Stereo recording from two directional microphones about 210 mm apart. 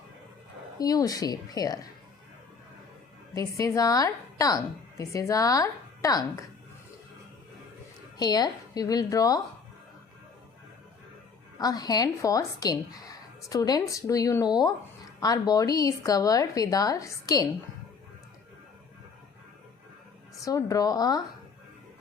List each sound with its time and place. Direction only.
0.8 s speech: 15° left (ahead or behind)
3.3 s speech: 15° left (ahead or behind)
8.2 s speech: 20° left (ahead or behind)
11.6 s speech: 20° left (ahead or behind)
20.4 s speech: 15° left (ahead or behind)